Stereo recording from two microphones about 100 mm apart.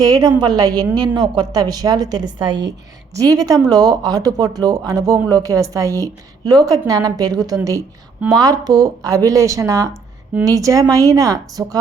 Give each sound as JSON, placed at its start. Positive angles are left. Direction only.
{"t": 0.0, "sound": "a woman's voice", "side_deg": -40}
{"t": 3.2, "sound": "a woman's voice", "side_deg": -35}